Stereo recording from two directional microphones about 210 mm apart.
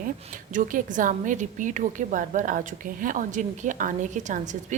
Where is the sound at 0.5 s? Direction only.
35° right (ahead or behind).